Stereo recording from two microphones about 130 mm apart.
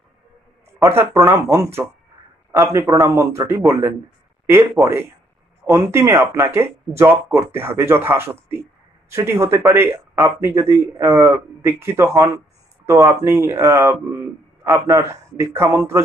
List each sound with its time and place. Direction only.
0.7 s speech: 20° right (ahead or behind)